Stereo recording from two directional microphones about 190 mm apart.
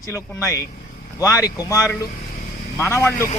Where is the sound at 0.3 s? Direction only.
15° left (ahead or behind).